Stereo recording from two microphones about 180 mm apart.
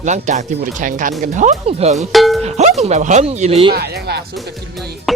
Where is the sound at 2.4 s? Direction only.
40° right (ahead or behind).